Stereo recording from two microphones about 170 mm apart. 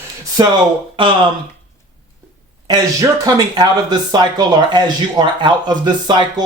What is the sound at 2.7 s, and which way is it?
Speech, 20° right (ahead or behind).